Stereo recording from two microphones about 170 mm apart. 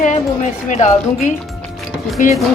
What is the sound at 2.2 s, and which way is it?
Speech, 50° left (ahead or behind).